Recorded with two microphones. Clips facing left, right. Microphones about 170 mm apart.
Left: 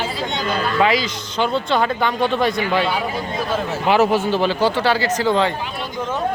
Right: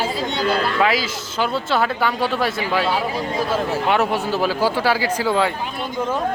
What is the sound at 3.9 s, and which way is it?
Speech, centre (ahead or behind).